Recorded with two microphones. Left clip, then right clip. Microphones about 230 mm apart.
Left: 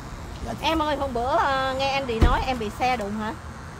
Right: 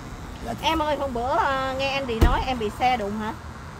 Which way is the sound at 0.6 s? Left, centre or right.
Centre.